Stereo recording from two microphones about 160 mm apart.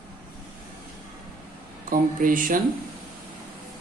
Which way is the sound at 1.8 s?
60° right (ahead or behind).